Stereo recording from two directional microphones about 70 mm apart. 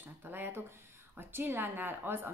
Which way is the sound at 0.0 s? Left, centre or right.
Right.